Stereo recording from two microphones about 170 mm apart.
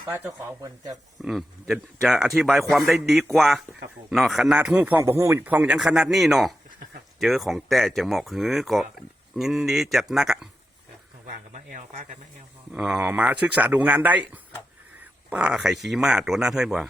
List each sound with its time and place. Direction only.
0.1 s speech: 15° right (ahead or behind)
1.2 s a man's voice: centre (ahead or behind)
11.3 s speech: 45° right (ahead or behind)
12.7 s speech: 5° right (ahead or behind)
15.3 s a man's voice: 5° right (ahead or behind)